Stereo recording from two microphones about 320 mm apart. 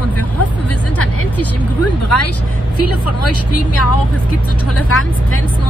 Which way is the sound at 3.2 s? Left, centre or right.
Left.